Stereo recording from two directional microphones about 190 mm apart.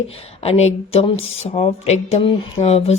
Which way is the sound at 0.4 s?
35° left (ahead or behind).